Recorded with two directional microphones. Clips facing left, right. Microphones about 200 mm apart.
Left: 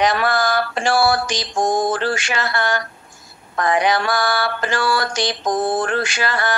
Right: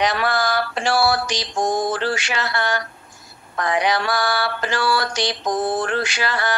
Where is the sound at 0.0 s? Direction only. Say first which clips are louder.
Left 2 dB; 50° left (ahead or behind).